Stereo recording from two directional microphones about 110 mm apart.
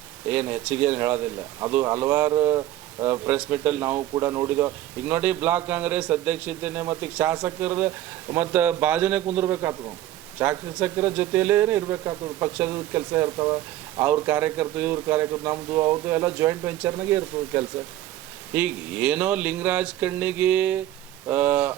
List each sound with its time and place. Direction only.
0.3 s a man's voice: 15° right (ahead or behind); by 14.0 s 35° right (ahead or behind)
14.3 s a man's voice: 20° right (ahead or behind)